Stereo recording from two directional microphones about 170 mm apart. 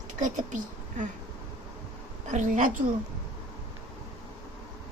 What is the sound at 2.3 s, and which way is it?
Speech, 50° right (ahead or behind).